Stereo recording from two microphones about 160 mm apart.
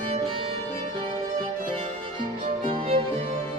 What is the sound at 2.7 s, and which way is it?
Music, 35° right (ahead or behind).